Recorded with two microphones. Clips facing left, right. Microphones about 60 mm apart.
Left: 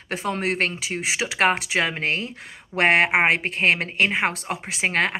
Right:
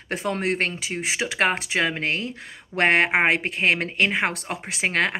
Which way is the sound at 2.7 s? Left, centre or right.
Centre.